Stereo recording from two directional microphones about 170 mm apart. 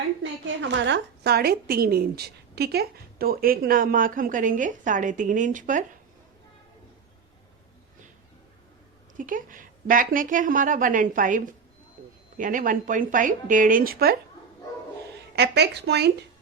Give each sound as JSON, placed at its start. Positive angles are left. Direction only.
{"t": 0.2, "sound": "a woman's voice", "side_deg": -90}
{"t": 9.1, "sound": "a woman's voice", "side_deg": -50}
{"t": 15.4, "sound": "speech", "side_deg": -75}